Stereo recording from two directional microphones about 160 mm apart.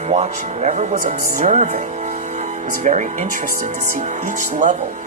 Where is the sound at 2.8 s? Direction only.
50° right (ahead or behind).